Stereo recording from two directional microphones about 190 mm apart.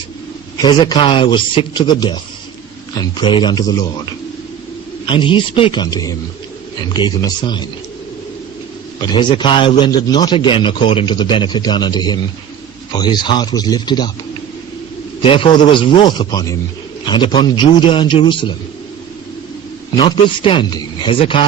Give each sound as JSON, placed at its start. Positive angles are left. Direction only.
{"t": 0.6, "sound": "a man's voice", "side_deg": 25}
{"t": 9.0, "sound": "a man's voice", "side_deg": 25}
{"t": 15.2, "sound": "a man's voice", "side_deg": 30}
{"t": 20.0, "sound": "a man's voice", "side_deg": 25}